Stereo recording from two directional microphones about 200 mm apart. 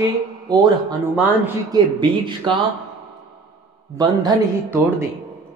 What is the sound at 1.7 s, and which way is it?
Speech, 25° right (ahead or behind).